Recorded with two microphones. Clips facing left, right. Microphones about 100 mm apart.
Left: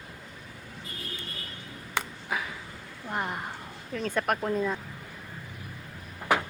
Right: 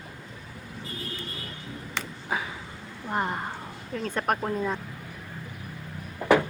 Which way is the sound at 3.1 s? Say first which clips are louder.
Right 4 dB; 5° right (ahead or behind).